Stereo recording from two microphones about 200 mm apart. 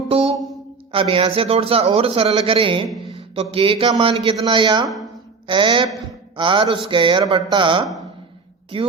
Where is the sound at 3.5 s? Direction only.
25° right (ahead or behind).